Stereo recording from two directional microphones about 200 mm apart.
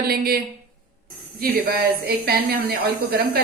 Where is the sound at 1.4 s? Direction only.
50° right (ahead or behind).